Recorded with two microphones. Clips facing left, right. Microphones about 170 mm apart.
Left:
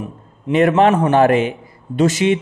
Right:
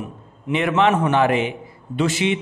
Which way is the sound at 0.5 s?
40° left (ahead or behind).